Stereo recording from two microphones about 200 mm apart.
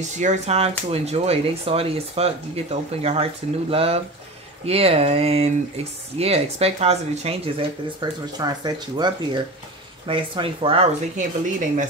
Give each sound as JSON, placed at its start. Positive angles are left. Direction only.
{"t": 0.1, "sound": "speech", "side_deg": -35}
{"t": 11.1, "sound": "speech", "side_deg": -40}